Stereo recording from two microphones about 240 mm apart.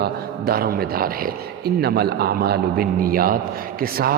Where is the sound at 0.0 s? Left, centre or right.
Right.